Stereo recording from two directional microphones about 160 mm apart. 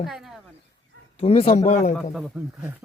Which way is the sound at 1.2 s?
40° left (ahead or behind).